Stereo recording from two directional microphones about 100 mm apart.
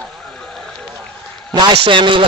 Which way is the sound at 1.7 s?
55° right (ahead or behind).